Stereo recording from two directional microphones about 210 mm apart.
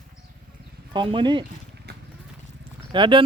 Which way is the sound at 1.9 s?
50° right (ahead or behind).